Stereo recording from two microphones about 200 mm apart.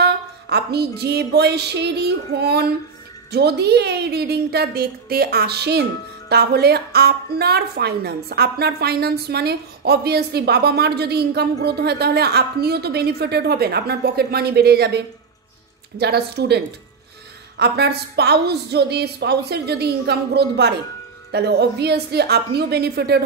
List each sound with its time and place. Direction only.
0.0 s a woman's voice: 55° right (ahead or behind)
16.0 s a woman's voice: 55° right (ahead or behind)